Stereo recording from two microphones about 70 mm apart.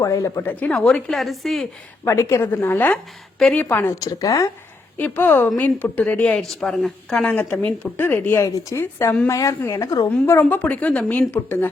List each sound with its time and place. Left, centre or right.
0.0 s a woman's voice: left
0.7 s a woman's voice: centre
1.1 s a woman's voice: centre
2.0 s a woman's voice: left
2.9 s a woman's voice: centre
3.5 s a woman's voice: left
4.0 s speech: left
4.9 s a woman's voice: left
6.4 s a woman's voice: centre
7.3 s a woman's voice: left
8.4 s speech: left
8.8 s a woman's voice: left
10.5 s a woman's voice: left
11.3 s a woman's voice: left